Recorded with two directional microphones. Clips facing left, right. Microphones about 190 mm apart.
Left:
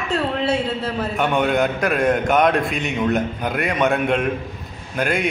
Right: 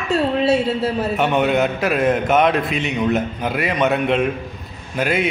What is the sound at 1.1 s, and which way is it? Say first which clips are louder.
A man's voice: even; 5° right (ahead or behind).